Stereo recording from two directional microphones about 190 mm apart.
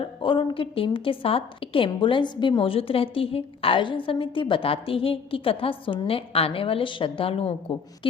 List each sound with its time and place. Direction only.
0.0 s a woman's voice: 25° left (ahead or behind)